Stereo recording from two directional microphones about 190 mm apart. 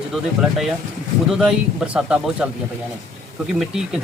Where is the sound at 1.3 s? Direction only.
5° right (ahead or behind).